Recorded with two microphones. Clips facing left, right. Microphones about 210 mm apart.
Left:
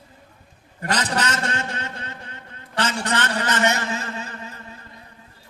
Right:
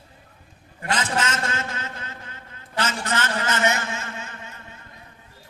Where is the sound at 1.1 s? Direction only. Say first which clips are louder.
Left 1 dB; 35° left (ahead or behind).